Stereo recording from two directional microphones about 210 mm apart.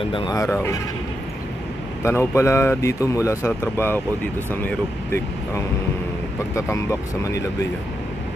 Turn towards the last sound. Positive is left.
turn(degrees=15)  # may be behind; listen again after turning